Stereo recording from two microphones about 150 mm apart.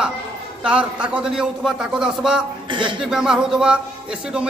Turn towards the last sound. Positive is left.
turn(degrees=-5)  # may be behind; listen again after turning